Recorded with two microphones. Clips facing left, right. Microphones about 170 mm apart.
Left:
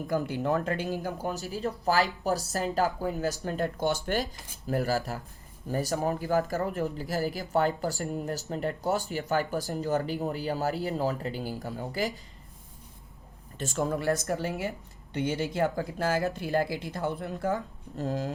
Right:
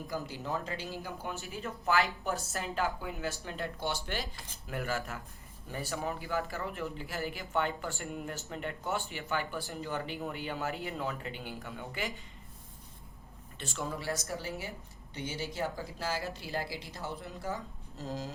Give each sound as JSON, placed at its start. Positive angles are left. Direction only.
{"t": 0.1, "sound": "speech", "side_deg": 55}
{"t": 1.0, "sound": "speech", "side_deg": 40}
{"t": 13.6, "sound": "speech", "side_deg": 45}